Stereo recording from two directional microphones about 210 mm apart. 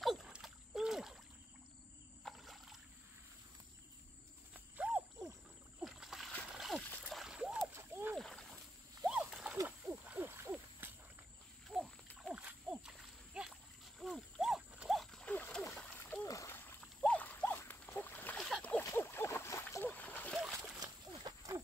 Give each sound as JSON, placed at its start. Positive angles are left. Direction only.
{"t": 0.0, "sound": "splash", "side_deg": 0}
{"t": 2.2, "sound": "rowboat", "side_deg": 0}
{"t": 4.6, "sound": "horse", "side_deg": -5}
{"t": 5.8, "sound": "splash", "side_deg": 0}
{"t": 8.2, "sound": "splash", "side_deg": 0}
{"t": 9.6, "sound": "hoot", "side_deg": -10}
{"t": 11.7, "sound": "a sound", "side_deg": 0}
{"t": 21.1, "sound": "a sound", "side_deg": -20}